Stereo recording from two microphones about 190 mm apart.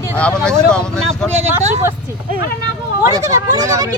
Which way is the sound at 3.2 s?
15° right (ahead or behind).